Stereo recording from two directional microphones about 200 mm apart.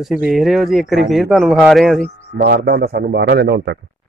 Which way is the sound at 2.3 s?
50° right (ahead or behind).